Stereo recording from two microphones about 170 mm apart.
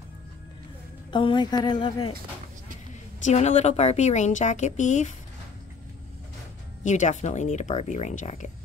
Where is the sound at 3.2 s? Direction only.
40° left (ahead or behind).